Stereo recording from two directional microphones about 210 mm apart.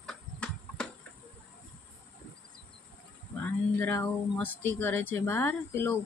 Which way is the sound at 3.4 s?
10° left (ahead or behind).